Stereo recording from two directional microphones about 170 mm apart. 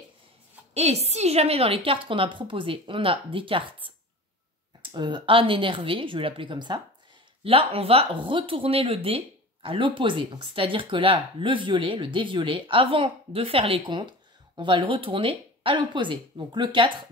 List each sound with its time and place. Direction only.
0.7 s speech: 40° right (ahead or behind)